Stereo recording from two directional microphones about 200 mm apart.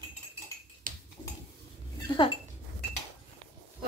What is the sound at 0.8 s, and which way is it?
Finger snapping, 45° right (ahead or behind).